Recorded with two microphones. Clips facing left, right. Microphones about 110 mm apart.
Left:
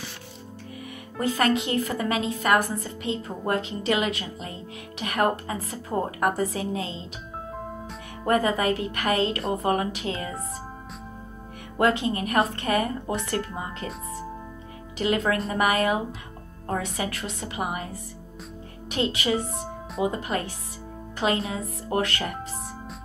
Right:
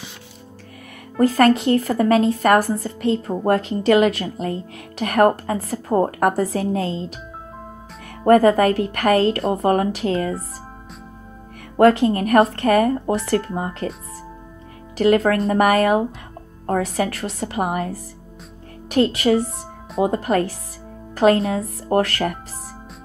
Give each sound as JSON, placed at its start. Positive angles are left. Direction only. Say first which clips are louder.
{"t": 1.2, "sound": "a woman's voice", "louder": "right 9 dB", "side_deg": -35}
{"t": 6.4, "sound": "a woman's voice", "louder": "right 6 dB", "side_deg": -40}
{"t": 8.3, "sound": "a woman's voice", "louder": "right 9 dB", "side_deg": -50}
{"t": 11.7, "sound": "a woman's voice", "louder": "right 9 dB", "side_deg": -45}
{"t": 12.6, "sound": "a woman's voice", "louder": "right 9 dB", "side_deg": -60}
{"t": 13.0, "sound": "speech", "louder": "right 8 dB", "side_deg": -35}
{"t": 15.0, "sound": "a woman's voice", "louder": "right 8 dB", "side_deg": -45}
{"t": 21.1, "sound": "music", "louder": "right 10 dB", "side_deg": -45}
{"t": 21.5, "sound": "speech", "louder": "right 8 dB", "side_deg": -35}